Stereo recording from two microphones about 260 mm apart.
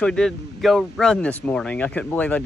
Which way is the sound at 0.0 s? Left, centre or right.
Centre.